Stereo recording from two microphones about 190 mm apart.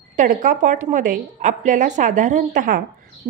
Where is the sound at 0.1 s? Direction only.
40° right (ahead or behind).